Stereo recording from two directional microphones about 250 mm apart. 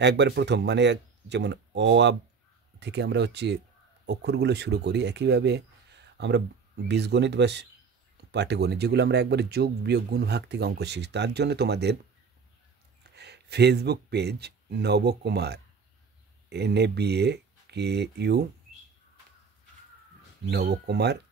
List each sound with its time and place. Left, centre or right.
0.0 s speech: right
13.1 s speech: right
20.4 s speech: right